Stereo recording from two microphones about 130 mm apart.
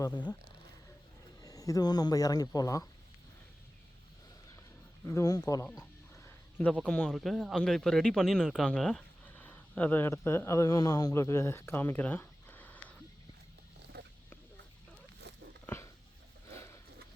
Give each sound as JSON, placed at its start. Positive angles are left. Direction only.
{"t": 0.0, "sound": "speech", "side_deg": 35}
{"t": 1.4, "sound": "speech", "side_deg": 25}
{"t": 5.0, "sound": "speech", "side_deg": 25}
{"t": 6.2, "sound": "a sound", "side_deg": 15}
{"t": 6.8, "sound": "speech", "side_deg": 10}
{"t": 15.6, "sound": "dog", "side_deg": 20}
{"t": 16.5, "sound": "a sound", "side_deg": 20}